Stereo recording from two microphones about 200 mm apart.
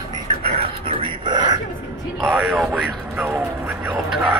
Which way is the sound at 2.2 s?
5° right (ahead or behind).